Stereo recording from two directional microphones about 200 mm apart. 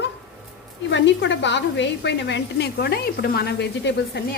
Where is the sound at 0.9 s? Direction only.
65° left (ahead or behind).